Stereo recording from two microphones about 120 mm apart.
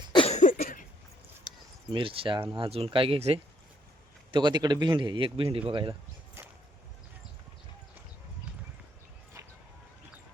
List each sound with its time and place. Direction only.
0.3 s cough: 85° left
1.9 s speech: 45° right (ahead or behind)
4.3 s a man's voice: 40° right (ahead or behind)